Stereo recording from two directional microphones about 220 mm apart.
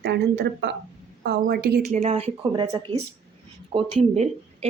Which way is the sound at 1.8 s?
35° right (ahead or behind).